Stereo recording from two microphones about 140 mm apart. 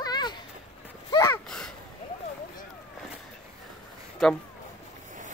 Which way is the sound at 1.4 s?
5° left (ahead or behind).